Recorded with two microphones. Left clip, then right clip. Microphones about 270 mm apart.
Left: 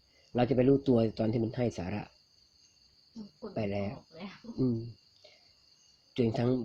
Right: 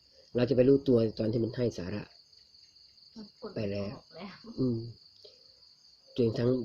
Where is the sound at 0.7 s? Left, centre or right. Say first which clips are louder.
Right 2 dB; centre.